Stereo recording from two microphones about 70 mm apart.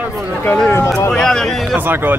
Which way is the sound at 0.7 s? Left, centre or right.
Left.